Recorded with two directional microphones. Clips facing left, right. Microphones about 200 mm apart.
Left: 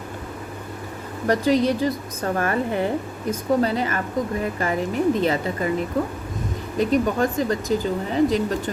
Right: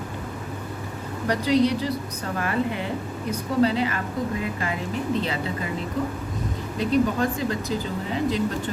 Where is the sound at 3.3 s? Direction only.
45° left (ahead or behind).